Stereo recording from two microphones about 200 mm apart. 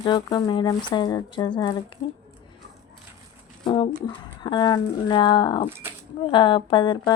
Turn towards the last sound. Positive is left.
turn(degrees=25)  # may be behind; listen again after turning